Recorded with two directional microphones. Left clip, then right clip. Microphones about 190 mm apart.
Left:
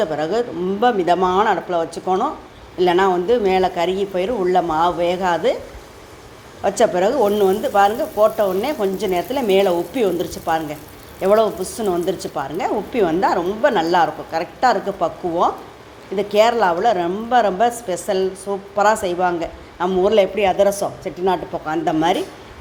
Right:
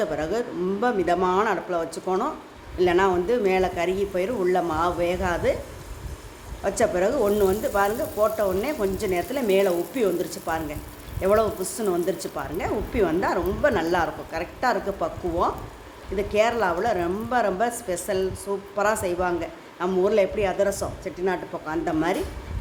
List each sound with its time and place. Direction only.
0.0 s speech: centre (ahead or behind)
6.6 s a man's voice: 5° left (ahead or behind)